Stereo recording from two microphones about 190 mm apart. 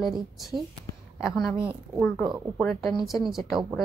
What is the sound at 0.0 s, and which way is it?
Speech, centre (ahead or behind).